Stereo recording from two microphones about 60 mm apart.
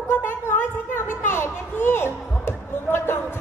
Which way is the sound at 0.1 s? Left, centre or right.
Left.